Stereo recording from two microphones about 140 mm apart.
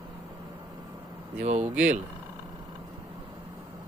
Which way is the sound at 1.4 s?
55° right (ahead or behind).